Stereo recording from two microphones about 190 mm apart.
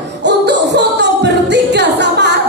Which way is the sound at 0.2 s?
65° right (ahead or behind).